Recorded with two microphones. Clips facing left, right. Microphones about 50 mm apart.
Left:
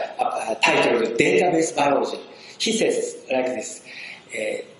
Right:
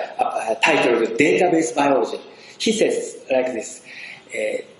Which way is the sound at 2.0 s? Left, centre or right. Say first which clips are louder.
Right 2 dB; right.